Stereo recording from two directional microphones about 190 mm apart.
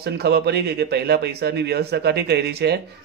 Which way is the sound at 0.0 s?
60° right (ahead or behind).